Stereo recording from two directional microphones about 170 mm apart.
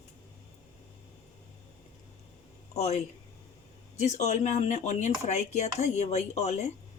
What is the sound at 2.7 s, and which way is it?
Speech, 40° left (ahead or behind).